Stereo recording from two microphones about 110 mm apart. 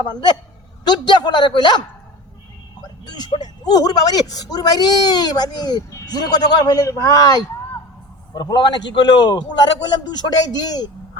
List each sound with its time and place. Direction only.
0.0 s a man's voice: 40° left (ahead or behind)
3.1 s a man's voice: 40° left (ahead or behind)